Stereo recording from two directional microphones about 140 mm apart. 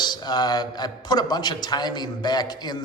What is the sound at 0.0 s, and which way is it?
A man's voice, 30° left (ahead or behind).